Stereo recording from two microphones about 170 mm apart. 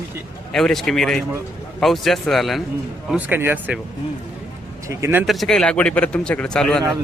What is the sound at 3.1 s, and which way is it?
Speech, 10° right (ahead or behind).